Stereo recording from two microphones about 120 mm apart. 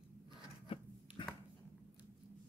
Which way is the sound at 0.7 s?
50° left (ahead or behind).